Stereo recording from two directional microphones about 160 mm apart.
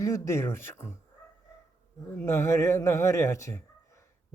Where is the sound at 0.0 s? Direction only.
20° left (ahead or behind).